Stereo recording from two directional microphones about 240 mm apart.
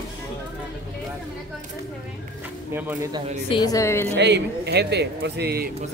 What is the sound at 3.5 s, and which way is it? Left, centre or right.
Speech, centre.